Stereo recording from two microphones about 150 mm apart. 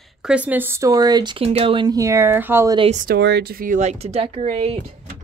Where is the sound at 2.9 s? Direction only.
85° right; by 4.8 s 45° right (ahead or behind).